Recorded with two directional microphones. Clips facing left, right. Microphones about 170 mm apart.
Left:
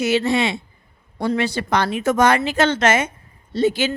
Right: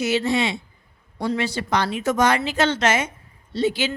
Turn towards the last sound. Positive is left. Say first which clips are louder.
# left 3 dB
turn(degrees=50)  # may be behind; listen again after turning